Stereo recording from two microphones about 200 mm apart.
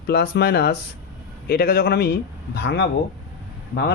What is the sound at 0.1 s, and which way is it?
Speech, 55° left (ahead or behind).